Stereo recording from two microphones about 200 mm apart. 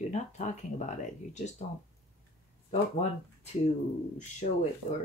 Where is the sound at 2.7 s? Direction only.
35° left (ahead or behind).